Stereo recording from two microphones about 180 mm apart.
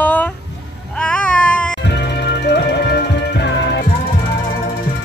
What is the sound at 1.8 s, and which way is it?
Music, 70° left (ahead or behind).